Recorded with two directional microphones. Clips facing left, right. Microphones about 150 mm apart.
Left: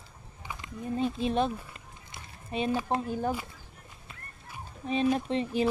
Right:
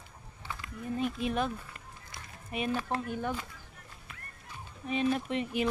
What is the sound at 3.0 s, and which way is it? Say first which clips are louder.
Speech: left 4 dB; 35° left (ahead or behind).